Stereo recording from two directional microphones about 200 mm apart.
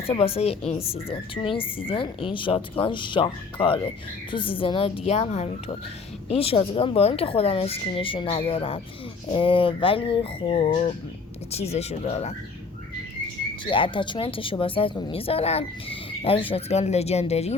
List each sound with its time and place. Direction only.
0.1 s speech: 30° left (ahead or behind)
13.7 s speech: 25° left (ahead or behind)